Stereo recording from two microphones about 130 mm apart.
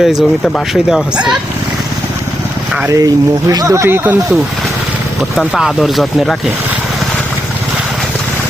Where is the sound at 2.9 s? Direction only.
30° right (ahead or behind).